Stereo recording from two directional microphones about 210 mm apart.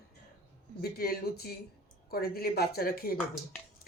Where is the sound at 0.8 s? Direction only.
45° left (ahead or behind).